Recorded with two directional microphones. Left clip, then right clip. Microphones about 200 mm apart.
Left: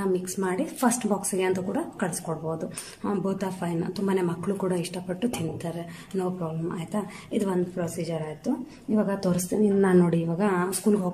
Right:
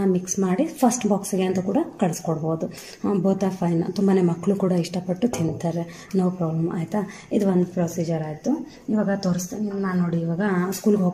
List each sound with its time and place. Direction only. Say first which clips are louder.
0.1 s speech: right 3 dB; 5° right (ahead or behind)
9.5 s a woman's voice: left 6 dB; 30° left (ahead or behind)
10.0 s speech: even; 5° left (ahead or behind)